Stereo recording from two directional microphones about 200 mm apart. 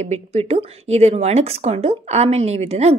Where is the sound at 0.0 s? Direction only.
35° right (ahead or behind).